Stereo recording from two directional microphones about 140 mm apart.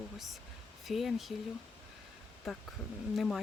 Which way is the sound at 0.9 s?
Centre (ahead or behind).